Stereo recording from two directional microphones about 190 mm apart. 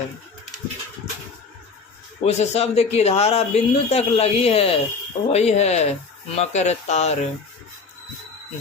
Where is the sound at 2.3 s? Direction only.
35° left (ahead or behind).